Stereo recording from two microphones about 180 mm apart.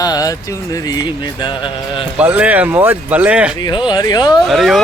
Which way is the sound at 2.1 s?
10° right (ahead or behind).